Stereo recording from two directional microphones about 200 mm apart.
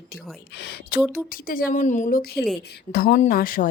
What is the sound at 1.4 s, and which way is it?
A woman's voice, 45° left (ahead or behind).